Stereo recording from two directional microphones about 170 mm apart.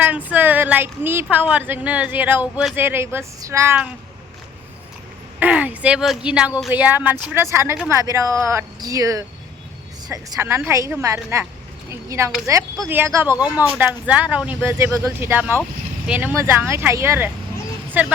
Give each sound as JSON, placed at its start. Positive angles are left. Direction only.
{"t": 0.0, "sound": "speech", "side_deg": -10}
{"t": 5.4, "sound": "speech", "side_deg": -10}